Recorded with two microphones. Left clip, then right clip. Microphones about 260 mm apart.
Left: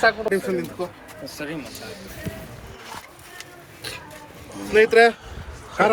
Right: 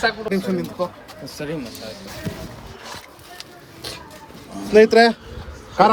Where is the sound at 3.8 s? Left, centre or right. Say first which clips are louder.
Right 1 dB; right.